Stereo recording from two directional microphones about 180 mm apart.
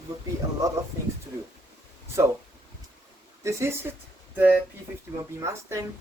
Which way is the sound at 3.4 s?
15° right (ahead or behind).